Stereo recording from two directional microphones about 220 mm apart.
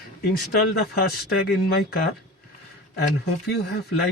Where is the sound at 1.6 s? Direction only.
45° left (ahead or behind).